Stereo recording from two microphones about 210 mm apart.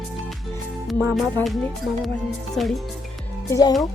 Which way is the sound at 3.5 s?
15° left (ahead or behind).